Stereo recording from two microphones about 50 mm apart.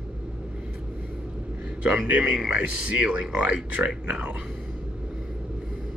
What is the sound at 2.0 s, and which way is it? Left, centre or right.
Speech, right.